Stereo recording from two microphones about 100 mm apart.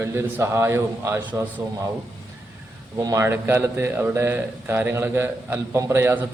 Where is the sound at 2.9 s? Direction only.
35° right (ahead or behind).